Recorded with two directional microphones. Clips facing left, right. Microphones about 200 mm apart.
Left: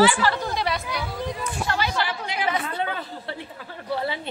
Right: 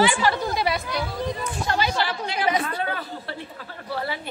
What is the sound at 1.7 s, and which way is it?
Chatter, 15° right (ahead or behind).